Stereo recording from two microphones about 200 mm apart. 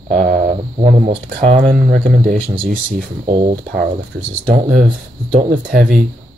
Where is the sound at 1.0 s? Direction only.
25° right (ahead or behind).